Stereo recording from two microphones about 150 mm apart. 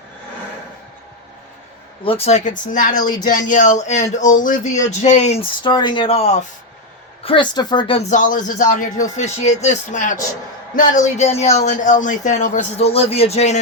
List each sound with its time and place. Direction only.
2.0 s speech: 40° left (ahead or behind)
5.6 s speech: 30° left (ahead or behind)
7.3 s speech: 30° left (ahead or behind)
8.1 s speech: 60° left (ahead or behind)